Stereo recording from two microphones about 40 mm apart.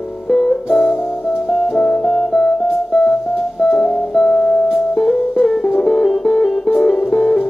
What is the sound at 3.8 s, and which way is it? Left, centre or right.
Music, left.